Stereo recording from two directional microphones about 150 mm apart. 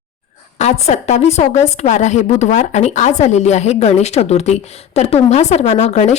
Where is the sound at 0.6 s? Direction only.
50° left (ahead or behind).